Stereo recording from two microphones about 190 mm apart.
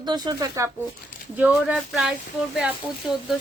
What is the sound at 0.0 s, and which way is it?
Speech, 20° right (ahead or behind).